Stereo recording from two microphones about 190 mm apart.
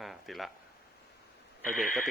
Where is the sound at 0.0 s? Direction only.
Centre (ahead or behind).